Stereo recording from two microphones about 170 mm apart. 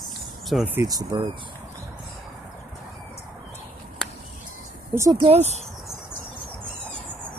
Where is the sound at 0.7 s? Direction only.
20° right (ahead or behind).